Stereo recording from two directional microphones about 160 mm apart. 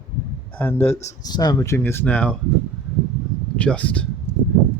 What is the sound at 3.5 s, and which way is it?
Speech, 10° left (ahead or behind).